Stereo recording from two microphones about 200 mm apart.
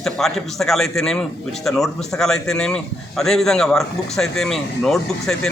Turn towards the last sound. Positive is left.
turn(degrees=0)  # may be behind; listen again after turning